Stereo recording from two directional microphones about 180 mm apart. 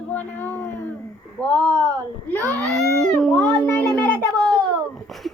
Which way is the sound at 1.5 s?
20° right (ahead or behind).